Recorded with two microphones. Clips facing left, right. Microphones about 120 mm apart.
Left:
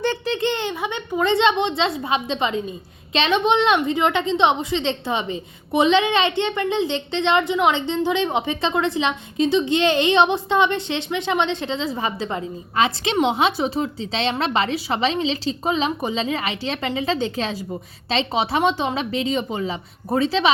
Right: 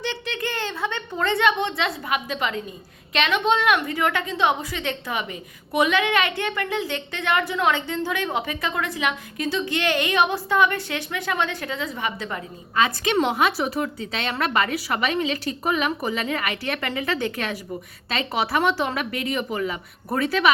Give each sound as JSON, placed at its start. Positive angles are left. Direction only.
{"t": 0.3, "sound": "a woman's voice", "side_deg": 25}